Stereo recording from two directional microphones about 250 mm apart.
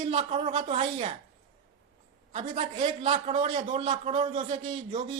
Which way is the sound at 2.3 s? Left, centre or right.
Right.